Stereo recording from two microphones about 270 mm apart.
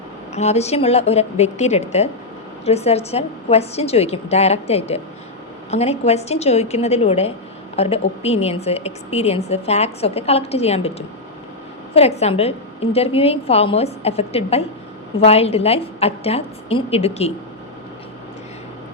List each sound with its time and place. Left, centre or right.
0.3 s a woman's voice: left